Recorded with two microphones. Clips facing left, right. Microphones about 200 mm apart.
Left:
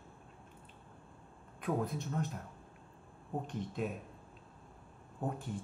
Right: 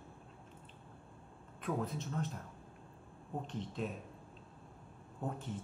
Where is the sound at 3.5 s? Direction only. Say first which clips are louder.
Left 2 dB; 5° left (ahead or behind).